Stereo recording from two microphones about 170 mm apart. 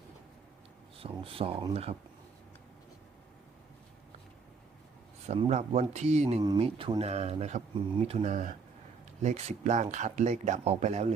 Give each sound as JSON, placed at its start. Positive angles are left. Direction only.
{"t": 0.9, "sound": "speech", "side_deg": -35}
{"t": 5.2, "sound": "speech", "side_deg": -40}
{"t": 6.4, "sound": "speech", "side_deg": -25}